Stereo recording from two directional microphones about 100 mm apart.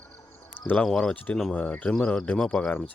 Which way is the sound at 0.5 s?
15° left (ahead or behind).